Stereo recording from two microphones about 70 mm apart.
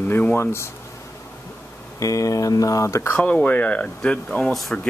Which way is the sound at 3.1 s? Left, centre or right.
Centre.